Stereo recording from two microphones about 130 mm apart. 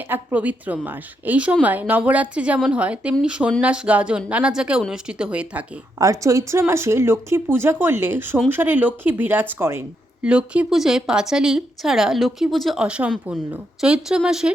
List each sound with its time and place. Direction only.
0.1 s a woman's voice: 15° right (ahead or behind)
6.0 s a woman's voice: 25° right (ahead or behind)
10.2 s a woman's voice: 10° right (ahead or behind)